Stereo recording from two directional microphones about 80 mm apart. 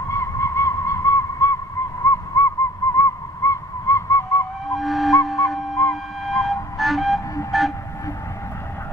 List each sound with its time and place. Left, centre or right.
0.1 s fowl: left
2.0 s owl: left
4.6 s flute: centre
6.2 s vehicle: centre